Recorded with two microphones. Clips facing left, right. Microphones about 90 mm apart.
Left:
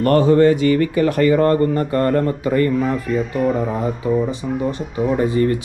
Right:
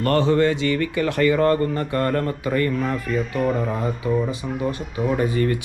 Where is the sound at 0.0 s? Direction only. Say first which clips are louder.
Left 5 dB; 40° left (ahead or behind).